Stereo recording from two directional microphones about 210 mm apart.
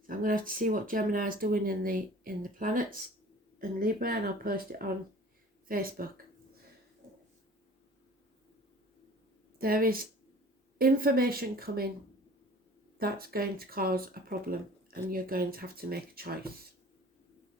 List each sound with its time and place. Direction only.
0.1 s speech: 40° right (ahead or behind)
9.6 s speech: 45° right (ahead or behind)
13.0 s speech: 45° right (ahead or behind)